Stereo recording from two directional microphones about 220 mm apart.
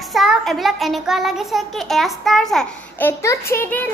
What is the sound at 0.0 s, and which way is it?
A child's voice, centre (ahead or behind).